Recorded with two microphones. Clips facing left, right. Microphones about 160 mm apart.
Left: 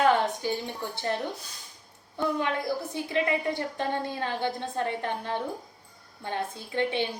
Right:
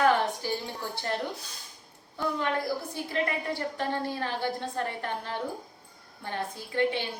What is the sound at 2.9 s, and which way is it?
A woman's voice, 20° left (ahead or behind).